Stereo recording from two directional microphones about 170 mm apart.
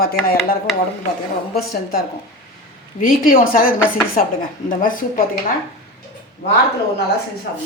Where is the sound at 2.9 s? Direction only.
55° left (ahead or behind).